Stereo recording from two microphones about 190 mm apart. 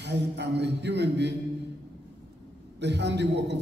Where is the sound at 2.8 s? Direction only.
65° right (ahead or behind).